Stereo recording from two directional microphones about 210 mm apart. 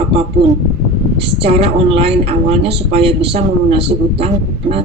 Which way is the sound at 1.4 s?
30° right (ahead or behind).